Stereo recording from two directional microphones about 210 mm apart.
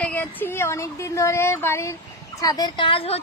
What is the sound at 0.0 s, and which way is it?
A woman's voice, 10° left (ahead or behind).